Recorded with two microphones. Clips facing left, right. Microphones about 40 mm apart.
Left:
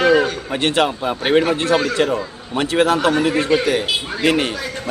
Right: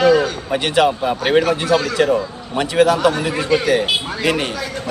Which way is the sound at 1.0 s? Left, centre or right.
Centre.